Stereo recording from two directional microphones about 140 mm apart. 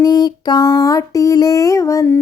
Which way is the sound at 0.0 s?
30° left (ahead or behind).